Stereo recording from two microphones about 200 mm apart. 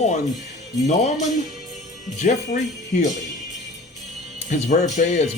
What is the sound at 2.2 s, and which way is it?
Speech, 40° left (ahead or behind).